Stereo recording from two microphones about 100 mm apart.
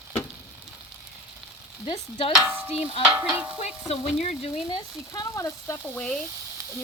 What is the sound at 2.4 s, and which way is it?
Stir, 25° right (ahead or behind).